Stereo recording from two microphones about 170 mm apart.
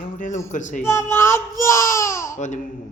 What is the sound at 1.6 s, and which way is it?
Baby cry, 15° left (ahead or behind).